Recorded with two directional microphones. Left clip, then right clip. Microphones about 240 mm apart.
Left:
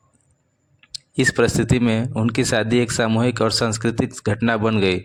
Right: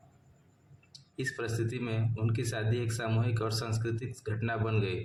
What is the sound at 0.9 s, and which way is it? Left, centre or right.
Speech, left.